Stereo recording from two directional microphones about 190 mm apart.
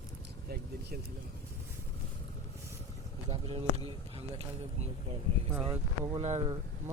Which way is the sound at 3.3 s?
30° right (ahead or behind).